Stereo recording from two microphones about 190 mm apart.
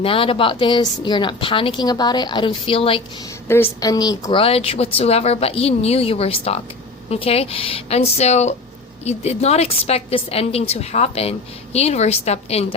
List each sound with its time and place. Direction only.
0.0 s a woman's voice: 30° left (ahead or behind)
3.5 s a woman's voice: 15° left (ahead or behind); by 12.6 s 35° left (ahead or behind)